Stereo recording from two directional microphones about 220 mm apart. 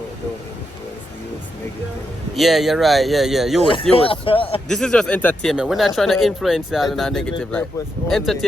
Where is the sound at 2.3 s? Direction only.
Centre (ahead or behind).